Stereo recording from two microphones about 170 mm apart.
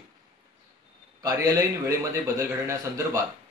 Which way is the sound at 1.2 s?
20° right (ahead or behind).